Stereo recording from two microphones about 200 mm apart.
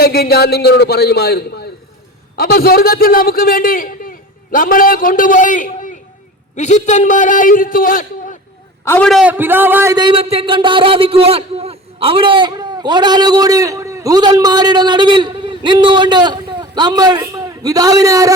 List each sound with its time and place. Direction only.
0.0 s a man's voice: 50° left (ahead or behind)
8.8 s a man's voice: 10° left (ahead or behind); by 18.3 s 15° right (ahead or behind)